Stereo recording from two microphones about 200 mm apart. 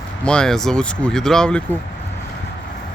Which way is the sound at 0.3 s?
5° left (ahead or behind).